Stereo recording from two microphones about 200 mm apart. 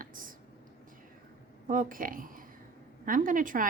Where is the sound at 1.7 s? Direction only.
40° right (ahead or behind).